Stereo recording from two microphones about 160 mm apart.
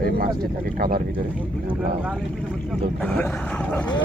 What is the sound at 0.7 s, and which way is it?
Speech, 65° right (ahead or behind).